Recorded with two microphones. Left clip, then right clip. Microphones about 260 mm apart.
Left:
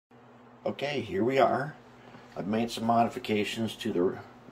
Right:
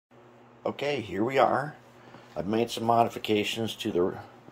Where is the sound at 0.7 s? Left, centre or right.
Centre.